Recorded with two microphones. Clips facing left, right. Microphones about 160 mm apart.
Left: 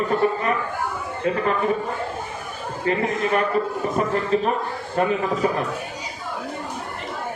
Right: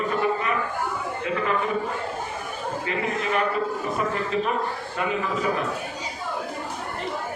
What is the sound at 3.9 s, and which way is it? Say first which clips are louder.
A man's voice: left 6 dB; 40° left (ahead or behind).